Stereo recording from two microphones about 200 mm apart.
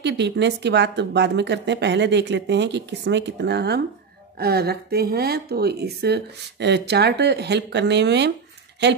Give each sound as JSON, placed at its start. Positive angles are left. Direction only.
{"t": 0.0, "sound": "speech", "side_deg": -60}